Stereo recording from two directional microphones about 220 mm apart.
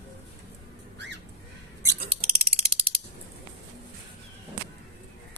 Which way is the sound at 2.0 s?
25° right (ahead or behind).